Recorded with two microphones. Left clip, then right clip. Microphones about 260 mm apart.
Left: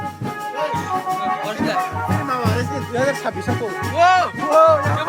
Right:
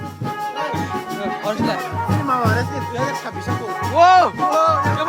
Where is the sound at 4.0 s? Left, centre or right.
Centre.